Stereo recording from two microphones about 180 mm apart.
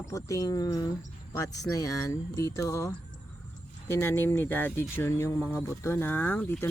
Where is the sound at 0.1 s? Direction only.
20° left (ahead or behind).